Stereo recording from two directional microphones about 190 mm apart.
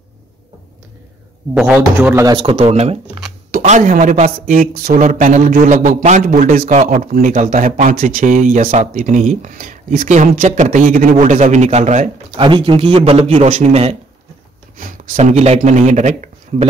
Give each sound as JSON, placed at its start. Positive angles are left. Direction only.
{"t": 1.5, "sound": "speech", "side_deg": -5}
{"t": 2.3, "sound": "speech", "side_deg": -30}
{"t": 12.4, "sound": "speech", "side_deg": -25}